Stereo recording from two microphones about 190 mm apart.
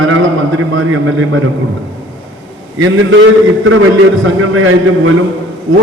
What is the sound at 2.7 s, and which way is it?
A man's voice, 90° right.